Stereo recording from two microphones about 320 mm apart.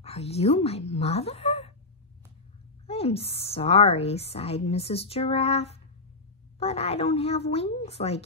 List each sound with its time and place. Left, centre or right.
0.0 s speech: centre
2.9 s a woman's voice: centre